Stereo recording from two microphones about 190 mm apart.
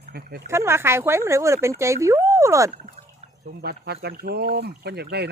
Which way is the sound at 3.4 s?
55° right (ahead or behind).